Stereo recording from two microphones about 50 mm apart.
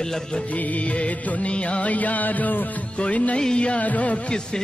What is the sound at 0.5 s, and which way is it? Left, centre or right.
Music, left.